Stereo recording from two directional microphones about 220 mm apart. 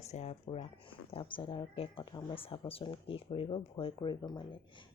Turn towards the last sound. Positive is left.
turn(degrees=20)  # may be behind; listen again after turning